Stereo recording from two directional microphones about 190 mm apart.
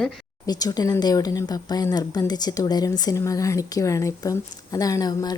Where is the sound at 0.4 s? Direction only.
20° left (ahead or behind).